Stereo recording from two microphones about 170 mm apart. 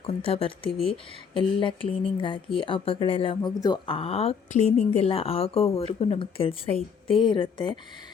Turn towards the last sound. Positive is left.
turn(degrees=30)  # may be behind; listen again after turning